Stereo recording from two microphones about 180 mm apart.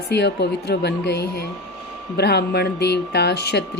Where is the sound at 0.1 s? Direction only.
70° left (ahead or behind).